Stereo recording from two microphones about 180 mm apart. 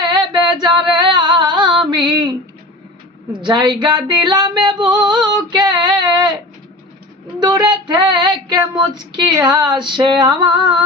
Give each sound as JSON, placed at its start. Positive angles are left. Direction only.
{"t": 0.0, "sound": "a sound", "side_deg": -25}
{"t": 3.4, "sound": "female singing", "side_deg": -25}
{"t": 7.3, "sound": "female singing", "side_deg": -25}